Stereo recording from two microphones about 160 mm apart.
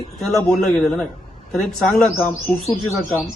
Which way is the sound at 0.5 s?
5° left (ahead or behind).